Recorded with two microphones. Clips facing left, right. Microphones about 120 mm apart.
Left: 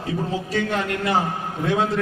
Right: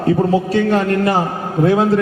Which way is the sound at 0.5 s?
40° right (ahead or behind).